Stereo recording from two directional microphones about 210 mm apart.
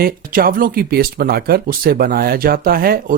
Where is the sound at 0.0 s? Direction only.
45° right (ahead or behind).